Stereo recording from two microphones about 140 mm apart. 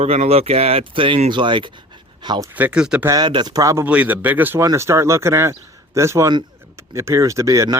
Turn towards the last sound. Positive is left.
turn(degrees=-25)  # may be behind; listen again after turning